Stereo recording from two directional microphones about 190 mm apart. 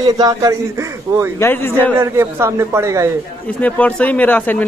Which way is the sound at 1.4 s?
15° left (ahead or behind).